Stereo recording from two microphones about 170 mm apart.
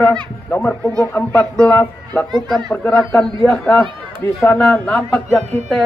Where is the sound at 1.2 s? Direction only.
10° left (ahead or behind).